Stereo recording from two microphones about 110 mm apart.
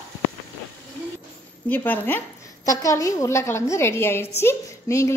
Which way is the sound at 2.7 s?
30° left (ahead or behind).